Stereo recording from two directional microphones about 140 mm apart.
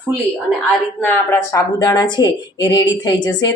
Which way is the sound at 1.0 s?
15° left (ahead or behind).